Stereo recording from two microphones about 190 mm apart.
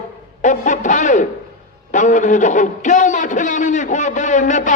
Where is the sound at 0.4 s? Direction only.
40° left (ahead or behind).